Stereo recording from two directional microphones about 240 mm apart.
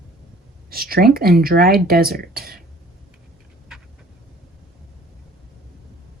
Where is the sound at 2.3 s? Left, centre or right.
Right.